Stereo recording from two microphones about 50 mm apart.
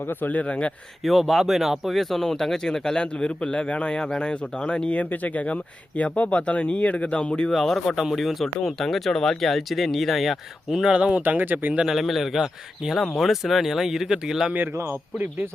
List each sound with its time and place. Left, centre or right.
0.0 s speech: left
1.0 s speech: centre
7.5 s speech: centre
10.8 s speech: right
11.2 s speech: right
11.9 s speech: centre
14.5 s speech: right